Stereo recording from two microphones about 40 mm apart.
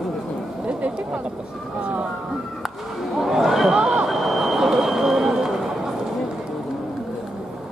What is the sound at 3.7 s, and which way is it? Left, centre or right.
Vehicle, centre.